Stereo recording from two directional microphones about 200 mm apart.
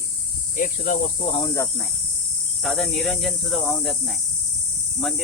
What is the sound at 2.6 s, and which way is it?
Speech, centre (ahead or behind).